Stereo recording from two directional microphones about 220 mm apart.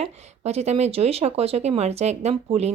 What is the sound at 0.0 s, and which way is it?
A woman's voice, 30° right (ahead or behind).